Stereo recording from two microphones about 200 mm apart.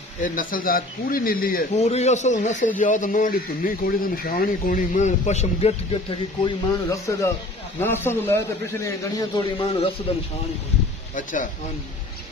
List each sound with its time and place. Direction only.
0.2 s speech: 45° left (ahead or behind)
1.8 s a man's voice: 35° left (ahead or behind); by 9.4 s 15° left (ahead or behind)
9.4 s speech: 30° left (ahead or behind)